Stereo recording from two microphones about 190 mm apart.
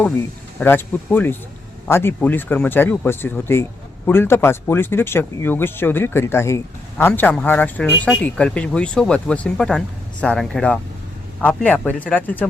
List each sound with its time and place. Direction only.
0.6 s speech: 10° left (ahead or behind)